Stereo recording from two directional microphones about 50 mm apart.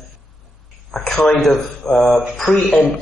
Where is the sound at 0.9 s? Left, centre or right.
Centre.